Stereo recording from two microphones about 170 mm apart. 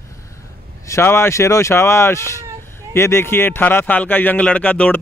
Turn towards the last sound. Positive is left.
turn(degrees=10)  # may be behind; listen again after turning